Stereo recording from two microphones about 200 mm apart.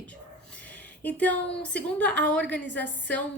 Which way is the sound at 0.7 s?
5° left (ahead or behind).